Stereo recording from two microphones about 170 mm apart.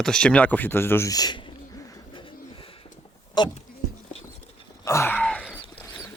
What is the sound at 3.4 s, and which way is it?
Speech, 25° left (ahead or behind).